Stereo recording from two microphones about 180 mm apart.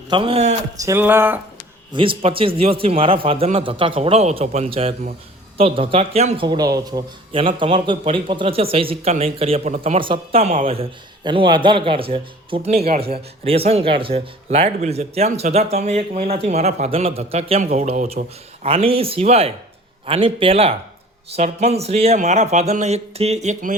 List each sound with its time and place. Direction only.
0.1 s speech: 30° right (ahead or behind)
0.8 s a sound: 15° right (ahead or behind)
1.9 s a man's voice: 30° right (ahead or behind)